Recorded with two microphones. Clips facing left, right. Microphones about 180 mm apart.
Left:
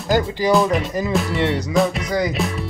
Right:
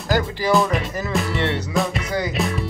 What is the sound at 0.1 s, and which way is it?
Speech, 15° left (ahead or behind).